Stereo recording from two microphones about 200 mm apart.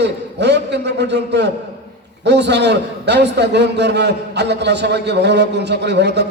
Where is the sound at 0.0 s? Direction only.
60° right (ahead or behind).